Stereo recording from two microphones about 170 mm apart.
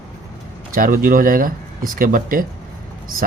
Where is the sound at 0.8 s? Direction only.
55° right (ahead or behind).